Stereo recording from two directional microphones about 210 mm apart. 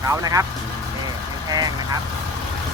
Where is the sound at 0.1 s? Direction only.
15° right (ahead or behind).